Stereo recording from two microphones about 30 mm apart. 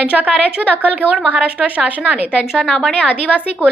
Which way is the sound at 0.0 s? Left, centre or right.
Right.